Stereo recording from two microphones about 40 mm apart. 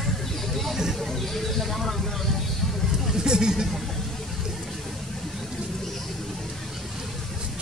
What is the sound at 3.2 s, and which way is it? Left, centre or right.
Speech, centre.